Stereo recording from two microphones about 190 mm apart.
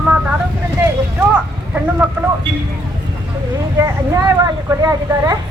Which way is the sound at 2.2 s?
10° right (ahead or behind).